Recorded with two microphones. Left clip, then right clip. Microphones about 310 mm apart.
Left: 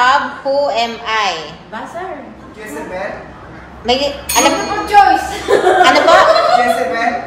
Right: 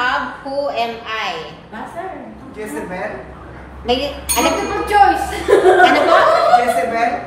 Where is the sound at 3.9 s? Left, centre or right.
Left.